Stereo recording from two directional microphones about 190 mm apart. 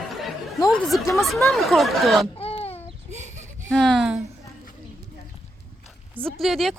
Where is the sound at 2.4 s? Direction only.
30° left (ahead or behind).